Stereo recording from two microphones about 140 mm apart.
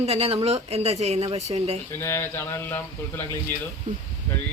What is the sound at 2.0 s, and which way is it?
Speech, 20° left (ahead or behind).